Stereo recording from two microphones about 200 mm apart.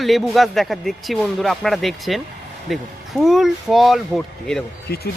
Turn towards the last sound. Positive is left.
turn(degrees=50)  # may be behind; listen again after turning